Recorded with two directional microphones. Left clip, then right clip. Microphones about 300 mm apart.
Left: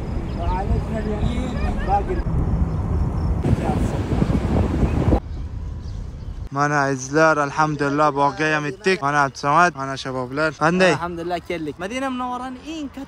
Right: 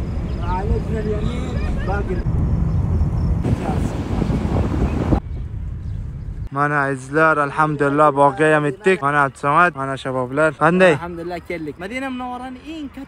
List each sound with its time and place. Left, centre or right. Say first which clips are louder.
0.0 s a sound: left 1 dB; centre
6.5 s speech: right 1 dB; centre
11.2 s speech: left 1 dB; centre